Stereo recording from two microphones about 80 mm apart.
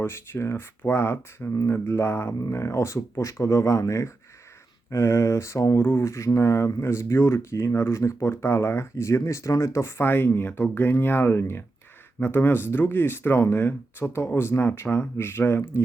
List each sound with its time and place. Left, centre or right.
0.0 s speech: left